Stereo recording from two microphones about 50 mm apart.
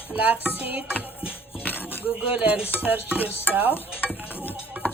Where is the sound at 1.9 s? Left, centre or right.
Right.